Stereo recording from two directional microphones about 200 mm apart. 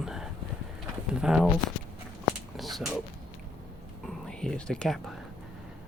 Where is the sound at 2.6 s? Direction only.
Centre (ahead or behind).